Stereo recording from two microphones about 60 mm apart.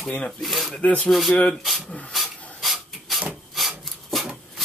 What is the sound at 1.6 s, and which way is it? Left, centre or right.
Speech, centre.